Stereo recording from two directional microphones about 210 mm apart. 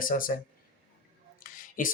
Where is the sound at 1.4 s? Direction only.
40° left (ahead or behind).